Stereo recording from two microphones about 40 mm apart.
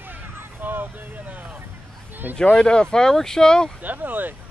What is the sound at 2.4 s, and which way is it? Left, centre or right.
Speech, left.